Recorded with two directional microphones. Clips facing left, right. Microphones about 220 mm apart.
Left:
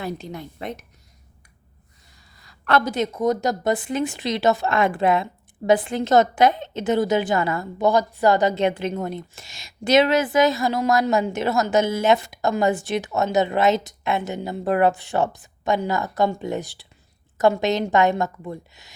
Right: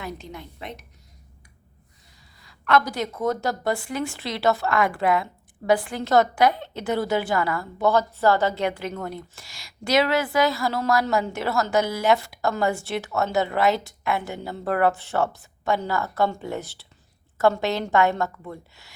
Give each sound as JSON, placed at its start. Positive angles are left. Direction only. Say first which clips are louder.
{"t": 0.0, "sound": "a woman's voice", "louder": "left 5 dB", "side_deg": 35}
{"t": 2.4, "sound": "a woman's voice", "louder": "left 1 dB", "side_deg": 40}